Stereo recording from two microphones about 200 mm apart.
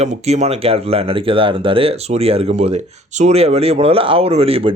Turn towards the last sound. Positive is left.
turn(degrees=-30)  # may be behind; listen again after turning